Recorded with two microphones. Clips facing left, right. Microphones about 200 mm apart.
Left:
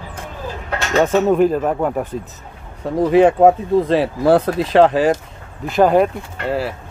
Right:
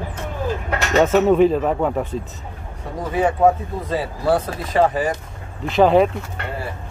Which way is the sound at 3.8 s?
80° left.